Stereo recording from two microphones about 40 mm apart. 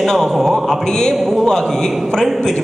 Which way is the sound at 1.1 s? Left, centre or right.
Centre.